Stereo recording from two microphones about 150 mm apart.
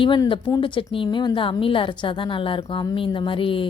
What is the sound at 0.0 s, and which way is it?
Speech, 35° left (ahead or behind).